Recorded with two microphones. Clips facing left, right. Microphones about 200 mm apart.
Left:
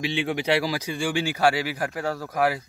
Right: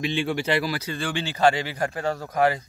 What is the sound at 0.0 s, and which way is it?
A man's voice, 15° left (ahead or behind).